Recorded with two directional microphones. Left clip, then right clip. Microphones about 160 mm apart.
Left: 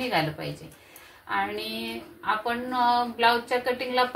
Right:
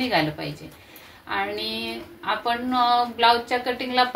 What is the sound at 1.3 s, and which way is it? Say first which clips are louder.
Speech: right 2 dB; 30° right (ahead or behind).